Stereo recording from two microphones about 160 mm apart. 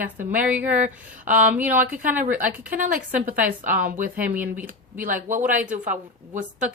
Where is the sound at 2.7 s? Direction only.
55° right (ahead or behind).